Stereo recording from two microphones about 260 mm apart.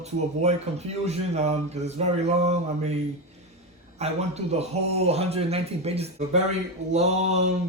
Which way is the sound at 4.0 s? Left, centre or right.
Right.